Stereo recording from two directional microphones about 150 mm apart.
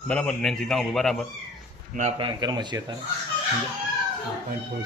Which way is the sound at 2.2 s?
30° right (ahead or behind).